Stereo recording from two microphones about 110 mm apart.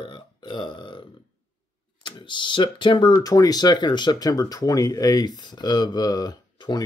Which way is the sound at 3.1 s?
30° left (ahead or behind).